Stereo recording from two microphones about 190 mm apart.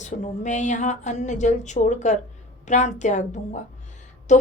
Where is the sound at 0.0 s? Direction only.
40° left (ahead or behind).